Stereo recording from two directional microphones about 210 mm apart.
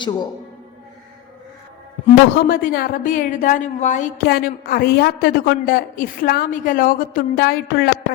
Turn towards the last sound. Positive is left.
turn(degrees=45)  # may be behind; listen again after turning